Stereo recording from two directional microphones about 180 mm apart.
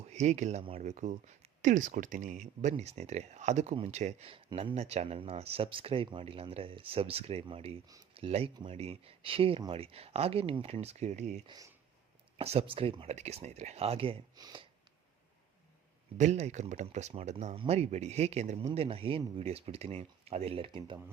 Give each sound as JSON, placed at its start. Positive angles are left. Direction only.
{"t": 0.1, "sound": "speech", "side_deg": -40}
{"t": 11.4, "sound": "speech", "side_deg": -20}
{"t": 12.4, "sound": "speech", "side_deg": -35}
{"t": 16.1, "sound": "speech", "side_deg": -40}